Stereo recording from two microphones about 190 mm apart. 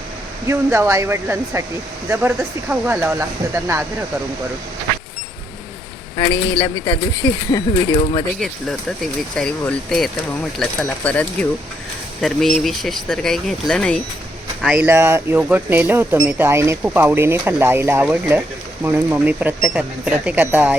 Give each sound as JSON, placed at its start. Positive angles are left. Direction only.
{"t": 0.4, "sound": "speech", "side_deg": -15}
{"t": 6.1, "sound": "speech", "side_deg": 15}
{"t": 9.3, "sound": "speech", "side_deg": 5}